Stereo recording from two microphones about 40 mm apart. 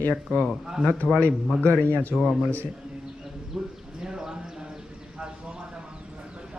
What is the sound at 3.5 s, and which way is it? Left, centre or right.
Speech, centre.